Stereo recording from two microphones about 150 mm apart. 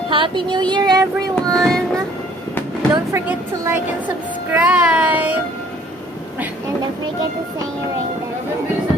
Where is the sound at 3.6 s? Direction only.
15° right (ahead or behind).